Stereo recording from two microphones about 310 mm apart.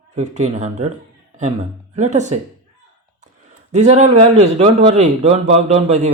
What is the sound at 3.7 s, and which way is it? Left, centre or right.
Speech, right.